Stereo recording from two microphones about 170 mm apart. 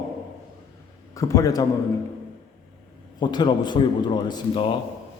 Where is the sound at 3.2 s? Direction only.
25° left (ahead or behind).